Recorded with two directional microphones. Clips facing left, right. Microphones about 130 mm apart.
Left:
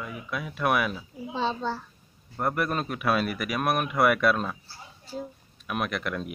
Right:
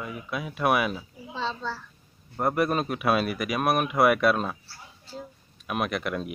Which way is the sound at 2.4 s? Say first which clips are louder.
Right 3 dB; 5° right (ahead or behind).